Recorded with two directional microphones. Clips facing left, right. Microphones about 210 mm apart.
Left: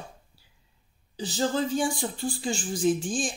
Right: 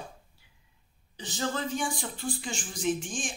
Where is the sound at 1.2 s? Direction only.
30° left (ahead or behind).